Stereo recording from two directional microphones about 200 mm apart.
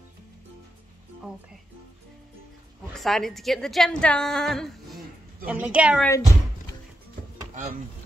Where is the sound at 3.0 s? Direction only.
Centre (ahead or behind).